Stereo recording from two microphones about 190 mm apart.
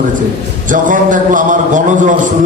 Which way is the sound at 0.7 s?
45° right (ahead or behind).